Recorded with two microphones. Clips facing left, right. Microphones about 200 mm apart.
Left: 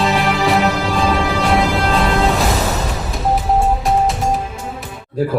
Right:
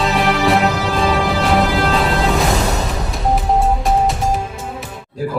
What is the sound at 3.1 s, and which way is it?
Music, centre (ahead or behind).